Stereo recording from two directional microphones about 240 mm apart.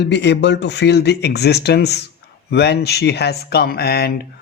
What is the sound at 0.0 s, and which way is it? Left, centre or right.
Speech, left.